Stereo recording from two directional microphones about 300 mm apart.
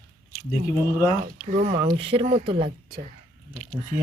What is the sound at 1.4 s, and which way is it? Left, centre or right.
Speech, right.